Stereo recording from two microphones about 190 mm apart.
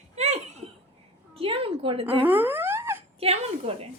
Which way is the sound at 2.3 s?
10° right (ahead or behind).